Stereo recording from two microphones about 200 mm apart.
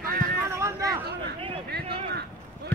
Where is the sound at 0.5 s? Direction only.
15° right (ahead or behind).